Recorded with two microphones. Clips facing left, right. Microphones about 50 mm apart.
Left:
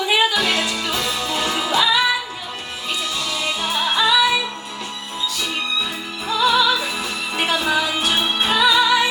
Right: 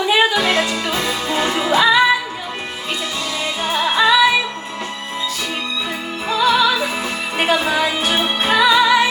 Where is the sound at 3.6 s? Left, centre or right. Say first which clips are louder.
Right 4 dB; right.